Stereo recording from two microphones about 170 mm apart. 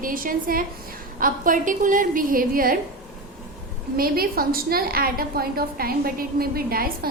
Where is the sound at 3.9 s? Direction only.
60° right (ahead or behind).